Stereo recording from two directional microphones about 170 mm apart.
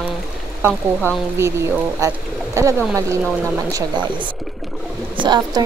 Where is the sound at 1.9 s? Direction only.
15° right (ahead or behind).